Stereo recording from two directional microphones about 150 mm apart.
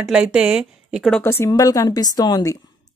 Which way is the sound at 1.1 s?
15° left (ahead or behind).